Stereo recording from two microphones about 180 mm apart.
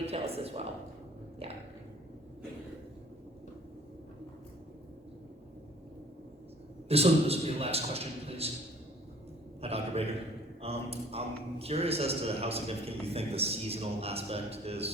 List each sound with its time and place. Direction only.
0.0 s speech: 35° right (ahead or behind)
6.8 s a man's voice: 35° right (ahead or behind)
9.6 s a man's voice: 35° right (ahead or behind)